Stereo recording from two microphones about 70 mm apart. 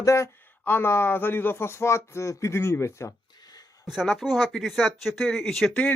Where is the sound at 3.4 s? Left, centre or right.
Left.